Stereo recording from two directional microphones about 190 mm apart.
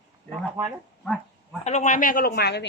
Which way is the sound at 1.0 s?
5° left (ahead or behind).